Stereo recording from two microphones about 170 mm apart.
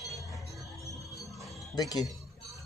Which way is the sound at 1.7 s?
25° left (ahead or behind).